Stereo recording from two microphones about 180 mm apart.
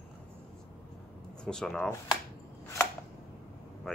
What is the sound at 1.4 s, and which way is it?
Speech, 5° left (ahead or behind).